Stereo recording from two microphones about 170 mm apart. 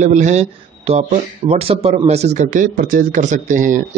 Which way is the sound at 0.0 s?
45° right (ahead or behind).